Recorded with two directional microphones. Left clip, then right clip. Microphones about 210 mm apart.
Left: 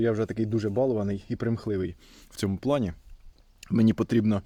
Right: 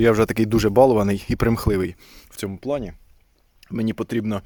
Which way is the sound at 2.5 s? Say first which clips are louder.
Right 1 dB; 15° left (ahead or behind).